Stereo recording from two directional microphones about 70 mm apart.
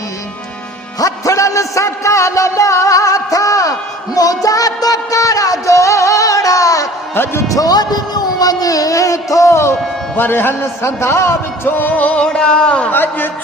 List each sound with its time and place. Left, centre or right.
0.9 s music: left
7.5 s a sound: left
10.2 s a man's voice: left; by 12.9 s centre
12.9 s a man's voice: left